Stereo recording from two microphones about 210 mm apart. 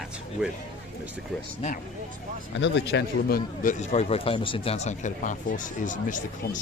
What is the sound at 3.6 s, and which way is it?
Speech, 30° left (ahead or behind).